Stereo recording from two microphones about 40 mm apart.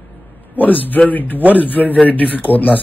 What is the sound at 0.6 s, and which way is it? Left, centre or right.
Speech, left.